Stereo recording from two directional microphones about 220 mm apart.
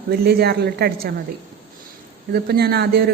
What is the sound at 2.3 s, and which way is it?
Speech, 45° right (ahead or behind).